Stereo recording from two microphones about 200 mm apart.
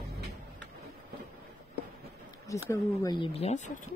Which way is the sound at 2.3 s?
15° left (ahead or behind).